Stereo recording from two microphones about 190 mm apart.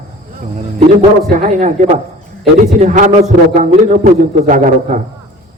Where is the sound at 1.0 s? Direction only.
40° right (ahead or behind).